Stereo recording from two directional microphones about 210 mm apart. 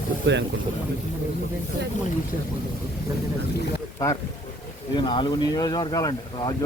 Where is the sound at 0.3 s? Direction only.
55° right (ahead or behind).